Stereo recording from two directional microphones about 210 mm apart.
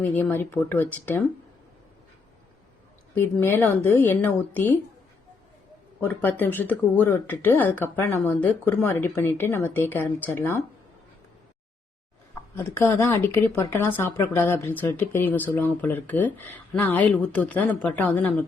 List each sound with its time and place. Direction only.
0.0 s speech: 10° left (ahead or behind)
3.2 s speech: 10° left (ahead or behind)
6.0 s speech: 10° left (ahead or behind)
12.3 s speech: 10° left (ahead or behind)